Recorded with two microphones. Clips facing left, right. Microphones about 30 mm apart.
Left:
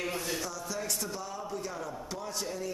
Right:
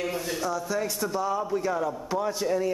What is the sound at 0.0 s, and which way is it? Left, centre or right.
Speech, centre.